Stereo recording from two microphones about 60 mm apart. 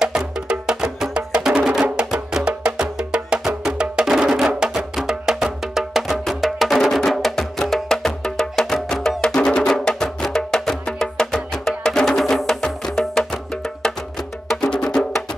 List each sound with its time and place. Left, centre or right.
0.0 s music: centre